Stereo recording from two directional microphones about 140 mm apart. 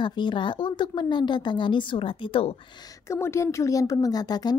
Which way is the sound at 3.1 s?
20° left (ahead or behind).